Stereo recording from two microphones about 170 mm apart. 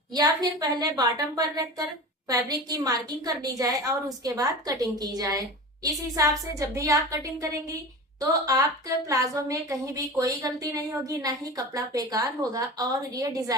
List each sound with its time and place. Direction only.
0.1 s a woman's voice: 25° right (ahead or behind)